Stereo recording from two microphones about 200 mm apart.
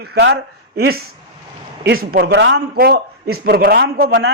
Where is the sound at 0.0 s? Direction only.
55° right (ahead or behind).